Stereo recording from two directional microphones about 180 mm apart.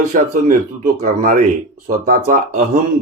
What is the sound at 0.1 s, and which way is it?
Speech, 45° right (ahead or behind).